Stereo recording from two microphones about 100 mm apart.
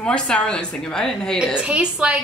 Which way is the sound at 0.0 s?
10° left (ahead or behind).